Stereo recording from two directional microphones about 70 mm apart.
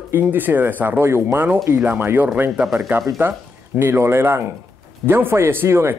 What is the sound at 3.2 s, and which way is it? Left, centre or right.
Speech, right.